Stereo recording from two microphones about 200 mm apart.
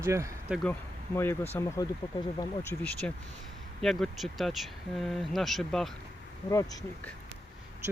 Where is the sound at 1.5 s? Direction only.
15° left (ahead or behind).